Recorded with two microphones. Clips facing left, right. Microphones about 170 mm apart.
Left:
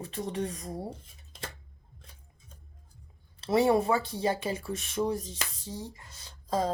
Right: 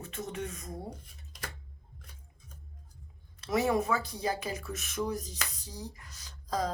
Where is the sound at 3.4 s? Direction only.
30° left (ahead or behind).